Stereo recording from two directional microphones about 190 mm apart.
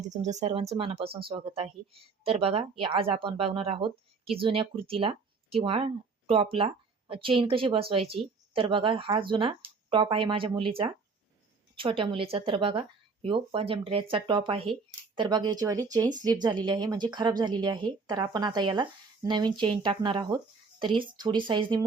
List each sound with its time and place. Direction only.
0.1 s speech: 40° right (ahead or behind)